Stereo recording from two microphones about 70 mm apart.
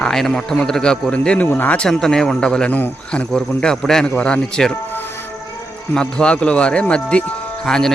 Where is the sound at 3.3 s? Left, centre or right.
Centre.